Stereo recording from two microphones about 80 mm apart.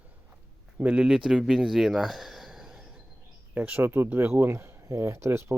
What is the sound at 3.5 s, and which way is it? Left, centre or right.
Speech, centre.